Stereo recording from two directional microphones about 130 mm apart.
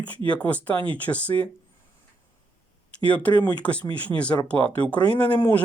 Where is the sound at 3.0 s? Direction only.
10° left (ahead or behind).